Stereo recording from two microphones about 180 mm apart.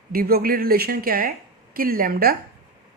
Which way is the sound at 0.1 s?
55° right (ahead or behind).